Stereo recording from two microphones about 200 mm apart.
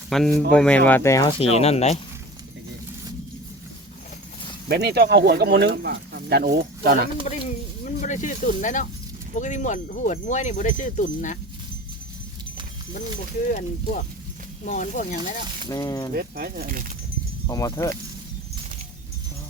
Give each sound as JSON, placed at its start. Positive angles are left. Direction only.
{"t": 0.1, "sound": "speech", "side_deg": 0}
{"t": 1.4, "sound": "speech", "side_deg": 30}
{"t": 4.7, "sound": "speech", "side_deg": -55}
{"t": 7.9, "sound": "speech", "side_deg": 40}
{"t": 13.5, "sound": "speech", "side_deg": 35}
{"t": 15.7, "sound": "speech", "side_deg": 20}
{"t": 16.1, "sound": "speech", "side_deg": -50}
{"t": 17.4, "sound": "speech", "side_deg": 20}